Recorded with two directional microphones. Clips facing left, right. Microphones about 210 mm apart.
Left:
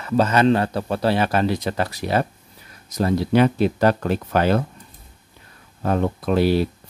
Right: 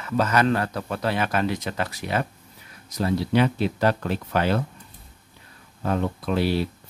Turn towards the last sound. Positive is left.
turn(degrees=45)  # may be behind; listen again after turning